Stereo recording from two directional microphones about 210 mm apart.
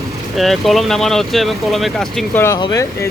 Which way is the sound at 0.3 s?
Centre (ahead or behind).